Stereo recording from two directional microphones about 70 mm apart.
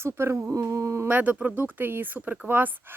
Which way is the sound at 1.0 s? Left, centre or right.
Right.